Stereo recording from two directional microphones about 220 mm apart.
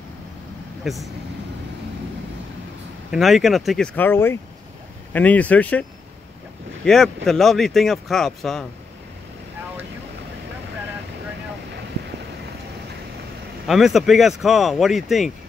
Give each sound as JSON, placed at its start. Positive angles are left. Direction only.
{"t": 0.8, "sound": "speech", "side_deg": 0}
{"t": 3.1, "sound": "speech", "side_deg": 0}
{"t": 13.7, "sound": "speech", "side_deg": 0}